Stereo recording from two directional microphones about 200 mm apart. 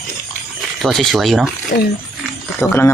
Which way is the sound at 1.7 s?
55° left (ahead or behind).